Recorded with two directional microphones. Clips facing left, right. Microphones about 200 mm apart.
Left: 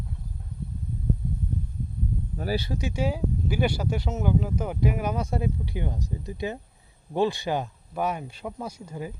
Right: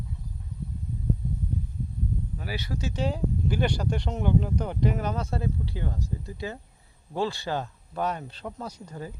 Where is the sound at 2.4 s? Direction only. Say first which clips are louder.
Left 12 dB; 40° left (ahead or behind).